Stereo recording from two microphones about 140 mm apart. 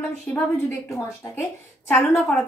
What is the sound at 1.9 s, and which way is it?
Speech, 10° left (ahead or behind).